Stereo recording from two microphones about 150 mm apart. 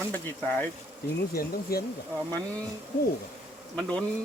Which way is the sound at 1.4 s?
90° left.